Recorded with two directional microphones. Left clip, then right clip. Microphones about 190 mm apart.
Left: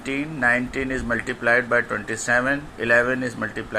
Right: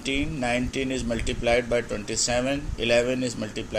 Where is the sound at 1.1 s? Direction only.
5° right (ahead or behind).